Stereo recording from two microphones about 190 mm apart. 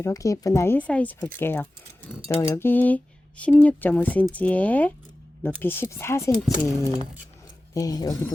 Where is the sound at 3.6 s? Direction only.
10° left (ahead or behind).